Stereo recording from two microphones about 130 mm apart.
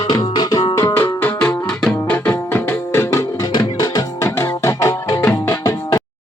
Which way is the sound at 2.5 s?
15° left (ahead or behind).